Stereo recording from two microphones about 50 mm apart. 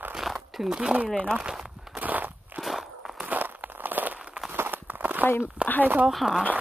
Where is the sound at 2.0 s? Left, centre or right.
Right.